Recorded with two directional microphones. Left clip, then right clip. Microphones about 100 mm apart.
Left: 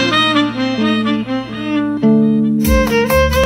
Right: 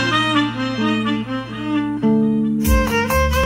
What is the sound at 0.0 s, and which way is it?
Music, 25° left (ahead or behind).